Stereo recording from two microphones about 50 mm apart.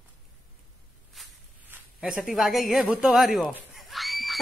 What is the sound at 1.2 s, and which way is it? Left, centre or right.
Walk, centre.